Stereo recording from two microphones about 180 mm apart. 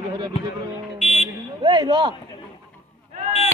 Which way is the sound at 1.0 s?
40° left (ahead or behind).